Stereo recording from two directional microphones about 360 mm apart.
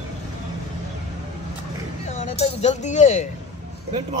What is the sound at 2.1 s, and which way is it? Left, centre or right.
Speech, centre.